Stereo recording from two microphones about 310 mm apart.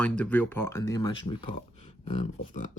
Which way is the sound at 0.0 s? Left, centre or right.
Centre.